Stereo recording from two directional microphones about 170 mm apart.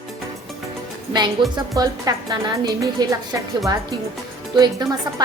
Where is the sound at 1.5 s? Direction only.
20° right (ahead or behind).